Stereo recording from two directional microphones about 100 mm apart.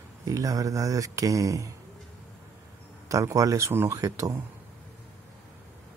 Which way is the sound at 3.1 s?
35° right (ahead or behind).